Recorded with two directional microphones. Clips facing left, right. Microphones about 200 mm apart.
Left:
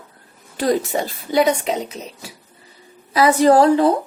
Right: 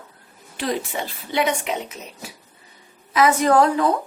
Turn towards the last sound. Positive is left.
turn(degrees=30)  # may be behind; listen again after turning